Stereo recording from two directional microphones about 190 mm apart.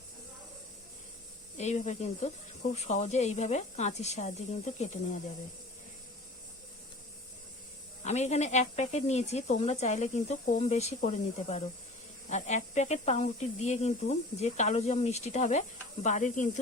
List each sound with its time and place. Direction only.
1.5 s speech: 35° left (ahead or behind)
8.0 s speech: 35° left (ahead or behind)